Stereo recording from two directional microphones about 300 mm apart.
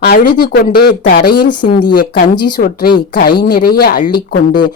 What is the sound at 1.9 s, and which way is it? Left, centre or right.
Speech, left.